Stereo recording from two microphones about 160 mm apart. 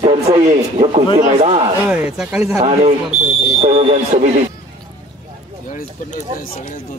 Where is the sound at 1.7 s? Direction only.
10° right (ahead or behind).